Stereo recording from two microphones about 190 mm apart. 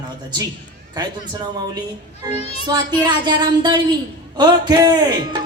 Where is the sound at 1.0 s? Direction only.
20° right (ahead or behind).